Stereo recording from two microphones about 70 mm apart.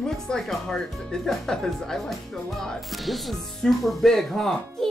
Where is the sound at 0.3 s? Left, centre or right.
Centre.